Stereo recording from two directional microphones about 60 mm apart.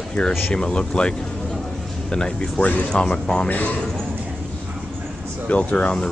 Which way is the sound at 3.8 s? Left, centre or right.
Centre.